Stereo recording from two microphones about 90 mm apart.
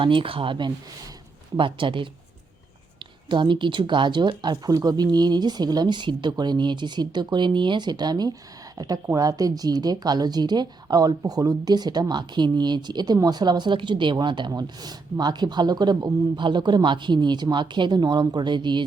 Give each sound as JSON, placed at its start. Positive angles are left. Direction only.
{"t": 0.0, "sound": "speech", "side_deg": -70}
{"t": 3.2, "sound": "speech", "side_deg": -60}